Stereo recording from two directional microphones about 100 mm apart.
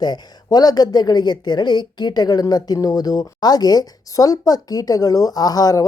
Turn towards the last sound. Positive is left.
turn(degrees=35)  # may be behind; listen again after turning